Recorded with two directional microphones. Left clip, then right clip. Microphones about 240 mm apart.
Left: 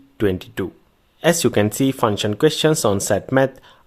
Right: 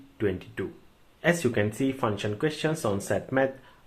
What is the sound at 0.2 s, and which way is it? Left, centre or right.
Speech, left.